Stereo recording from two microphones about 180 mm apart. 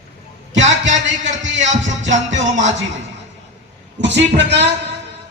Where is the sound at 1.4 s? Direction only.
90° right.